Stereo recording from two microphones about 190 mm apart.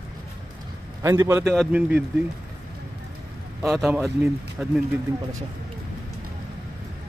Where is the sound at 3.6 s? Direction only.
Centre (ahead or behind).